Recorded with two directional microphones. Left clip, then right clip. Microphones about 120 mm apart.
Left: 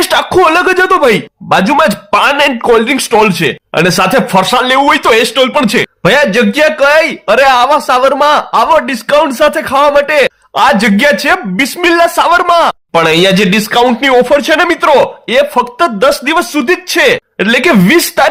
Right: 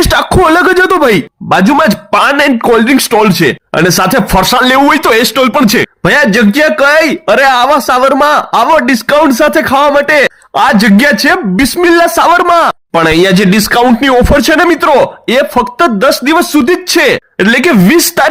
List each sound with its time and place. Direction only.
0.0 s speech: 40° right (ahead or behind)
1.5 s speech: 30° right (ahead or behind); by 15.1 s 50° right (ahead or behind)
15.3 s speech: 30° right (ahead or behind)